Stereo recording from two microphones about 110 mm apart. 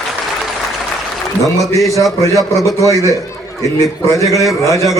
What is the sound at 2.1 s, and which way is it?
A man's voice, 30° left (ahead or behind).